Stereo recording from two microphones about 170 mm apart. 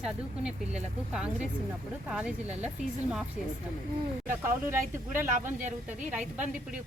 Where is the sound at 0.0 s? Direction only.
5° right (ahead or behind).